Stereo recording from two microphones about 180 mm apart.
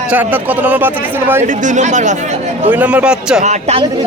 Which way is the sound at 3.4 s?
35° right (ahead or behind).